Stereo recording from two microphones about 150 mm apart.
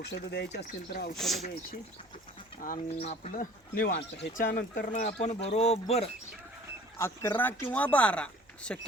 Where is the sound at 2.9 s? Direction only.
45° left (ahead or behind).